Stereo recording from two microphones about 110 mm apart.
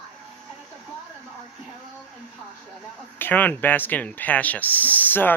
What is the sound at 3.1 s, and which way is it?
Speech, 15° left (ahead or behind).